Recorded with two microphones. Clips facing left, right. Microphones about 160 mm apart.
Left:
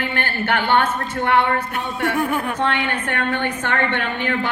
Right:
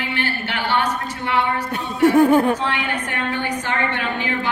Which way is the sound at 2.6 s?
60° left (ahead or behind).